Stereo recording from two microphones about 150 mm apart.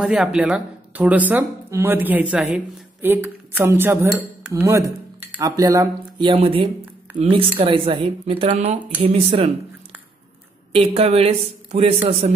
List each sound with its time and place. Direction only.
0.0 s speech: 5° right (ahead or behind); by 9.5 s 40° right (ahead or behind)
10.7 s a man's voice: 40° right (ahead or behind)